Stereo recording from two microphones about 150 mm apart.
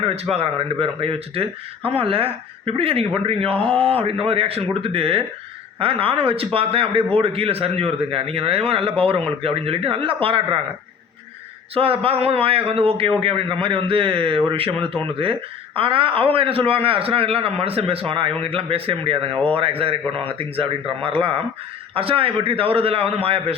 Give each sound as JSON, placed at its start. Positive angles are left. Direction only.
{"t": 0.0, "sound": "speech", "side_deg": -40}
{"t": 11.7, "sound": "speech", "side_deg": -40}